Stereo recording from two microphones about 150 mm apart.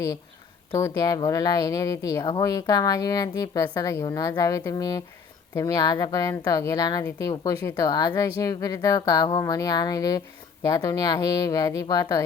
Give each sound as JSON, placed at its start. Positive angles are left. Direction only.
{"t": 0.8, "sound": "speech", "side_deg": 20}